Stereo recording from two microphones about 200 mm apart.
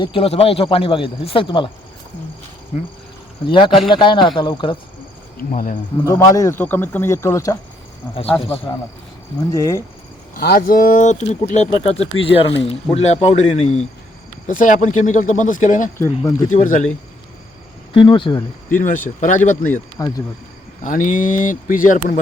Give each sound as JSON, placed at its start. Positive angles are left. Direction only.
{"t": 0.0, "sound": "speech", "side_deg": 25}
{"t": 3.4, "sound": "speech", "side_deg": 25}
{"t": 5.4, "sound": "speech", "side_deg": 45}
{"t": 6.1, "sound": "speech", "side_deg": 15}
{"t": 8.7, "sound": "speech", "side_deg": 20}
{"t": 10.3, "sound": "speech", "side_deg": 50}
{"t": 16.0, "sound": "speech", "side_deg": 15}
{"t": 16.5, "sound": "speech", "side_deg": 40}
{"t": 17.9, "sound": "speech", "side_deg": 25}
{"t": 19.2, "sound": "speech", "side_deg": 40}
{"t": 20.0, "sound": "speech", "side_deg": 15}
{"t": 20.8, "sound": "speech", "side_deg": 40}